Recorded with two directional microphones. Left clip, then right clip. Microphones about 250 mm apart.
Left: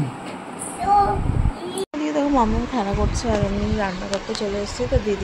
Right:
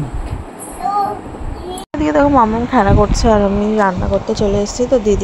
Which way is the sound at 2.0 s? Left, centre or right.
Right.